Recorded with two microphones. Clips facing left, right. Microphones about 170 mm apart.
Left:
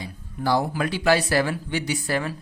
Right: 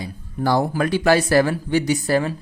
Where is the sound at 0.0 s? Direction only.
45° right (ahead or behind).